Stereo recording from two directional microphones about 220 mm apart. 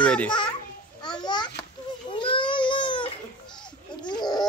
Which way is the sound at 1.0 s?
20° left (ahead or behind).